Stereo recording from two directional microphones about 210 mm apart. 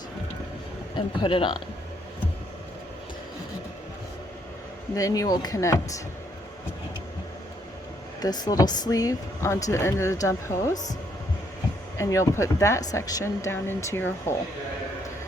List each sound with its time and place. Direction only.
0.9 s speech: 25° left (ahead or behind)
4.9 s a woman's voice: 15° left (ahead or behind)
8.2 s a woman's voice: 20° left (ahead or behind)
11.9 s a woman's voice: 15° left (ahead or behind)